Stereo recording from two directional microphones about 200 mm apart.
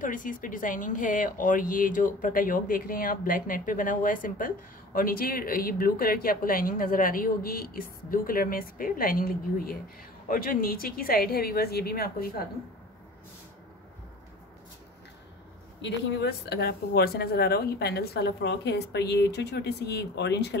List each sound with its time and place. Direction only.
0.0 s speech: 40° left (ahead or behind)
15.8 s a woman's voice: 60° left (ahead or behind)